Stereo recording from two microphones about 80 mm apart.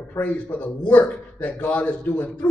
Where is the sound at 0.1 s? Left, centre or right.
Centre.